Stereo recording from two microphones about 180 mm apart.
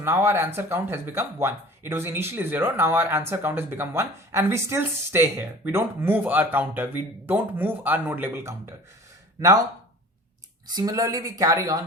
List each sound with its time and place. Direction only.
0.0 s speech: 15° right (ahead or behind)
10.8 s speech: 20° right (ahead or behind)